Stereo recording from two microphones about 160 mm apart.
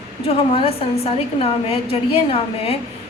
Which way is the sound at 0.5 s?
35° left (ahead or behind).